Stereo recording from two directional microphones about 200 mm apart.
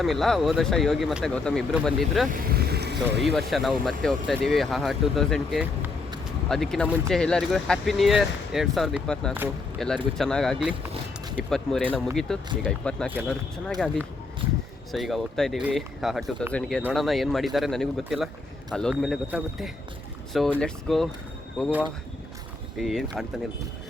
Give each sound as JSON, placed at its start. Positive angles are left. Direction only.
{"t": 0.0, "sound": "speech", "side_deg": 0}
{"t": 2.3, "sound": "speech", "side_deg": -45}
{"t": 3.5, "sound": "speech", "side_deg": 0}
{"t": 13.1, "sound": "speech", "side_deg": -5}
{"t": 22.8, "sound": "speech", "side_deg": 0}